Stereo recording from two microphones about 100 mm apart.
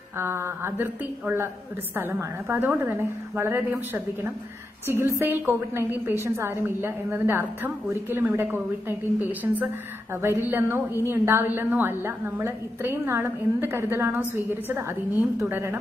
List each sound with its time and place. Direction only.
0.2 s a woman's voice: 25° right (ahead or behind)